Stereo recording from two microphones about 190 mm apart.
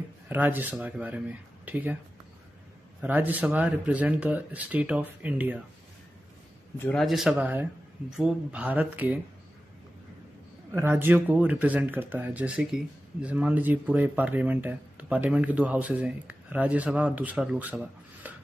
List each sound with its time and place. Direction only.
0.3 s speech: 10° right (ahead or behind)
3.0 s speech: 10° right (ahead or behind)
6.8 s speech: centre (ahead or behind)
10.7 s speech: 10° right (ahead or behind)